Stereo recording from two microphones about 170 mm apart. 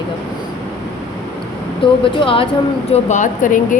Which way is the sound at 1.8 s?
30° left (ahead or behind).